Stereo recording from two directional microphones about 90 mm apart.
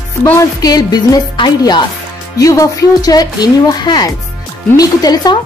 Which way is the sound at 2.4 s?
40° left (ahead or behind).